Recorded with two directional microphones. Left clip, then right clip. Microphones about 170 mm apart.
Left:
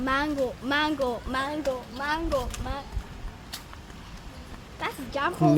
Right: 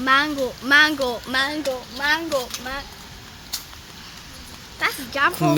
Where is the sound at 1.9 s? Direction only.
35° right (ahead or behind).